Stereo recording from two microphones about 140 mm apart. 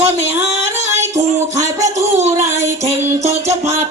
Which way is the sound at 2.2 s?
55° right (ahead or behind).